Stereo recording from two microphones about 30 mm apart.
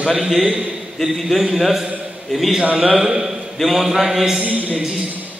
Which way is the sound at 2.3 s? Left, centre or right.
Centre.